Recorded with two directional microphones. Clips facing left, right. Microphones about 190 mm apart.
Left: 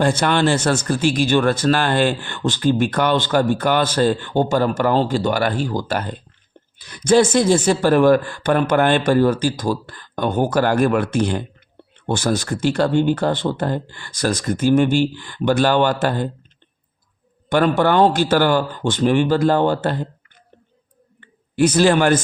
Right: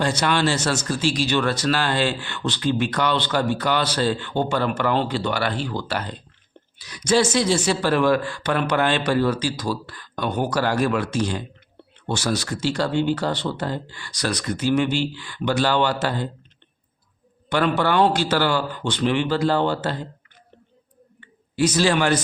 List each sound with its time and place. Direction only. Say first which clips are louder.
0.0 s speech: left 4 dB; 50° left (ahead or behind)
17.5 s speech: left 4 dB; 50° left (ahead or behind)
21.5 s speech: left 5 dB; 55° left (ahead or behind)